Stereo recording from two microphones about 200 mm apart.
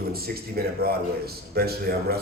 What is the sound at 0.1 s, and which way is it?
A man's voice, 50° right (ahead or behind).